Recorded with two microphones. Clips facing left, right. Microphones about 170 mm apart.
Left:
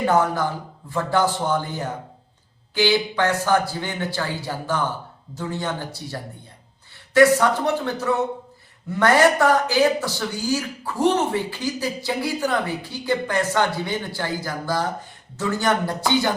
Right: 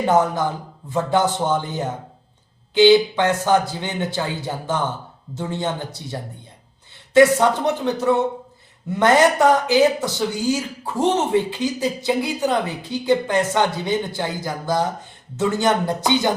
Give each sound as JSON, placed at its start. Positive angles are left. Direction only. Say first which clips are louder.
{"t": 0.0, "sound": "speech", "louder": "right 2 dB", "side_deg": -20}